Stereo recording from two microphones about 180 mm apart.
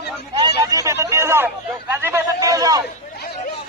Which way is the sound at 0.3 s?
20° right (ahead or behind).